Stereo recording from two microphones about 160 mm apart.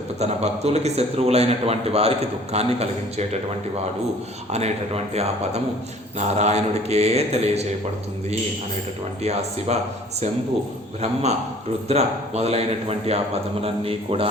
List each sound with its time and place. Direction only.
0.2 s a man's voice: 45° right (ahead or behind)
5.1 s a man's voice: 40° right (ahead or behind)
9.2 s a man's voice: 40° right (ahead or behind)
11.0 s a man's voice: 45° right (ahead or behind)